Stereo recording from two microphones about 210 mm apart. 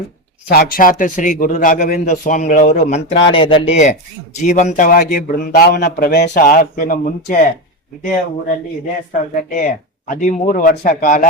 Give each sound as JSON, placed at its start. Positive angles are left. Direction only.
{"t": 0.4, "sound": "a man's voice", "side_deg": 45}
{"t": 9.3, "sound": "a man's voice", "side_deg": 40}